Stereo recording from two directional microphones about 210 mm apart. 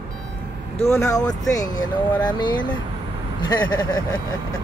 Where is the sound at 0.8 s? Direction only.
15° left (ahead or behind).